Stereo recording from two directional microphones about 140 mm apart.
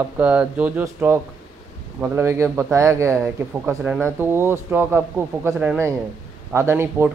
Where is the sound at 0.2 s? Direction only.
10° right (ahead or behind).